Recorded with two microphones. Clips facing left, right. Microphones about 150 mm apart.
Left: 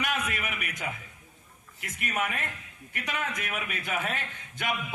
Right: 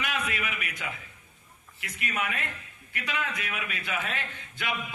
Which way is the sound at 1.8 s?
45° left (ahead or behind).